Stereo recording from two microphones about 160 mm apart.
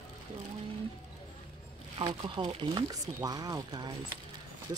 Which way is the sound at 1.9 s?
30° right (ahead or behind).